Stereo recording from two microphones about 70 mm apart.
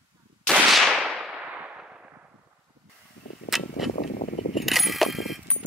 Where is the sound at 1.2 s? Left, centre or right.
Centre.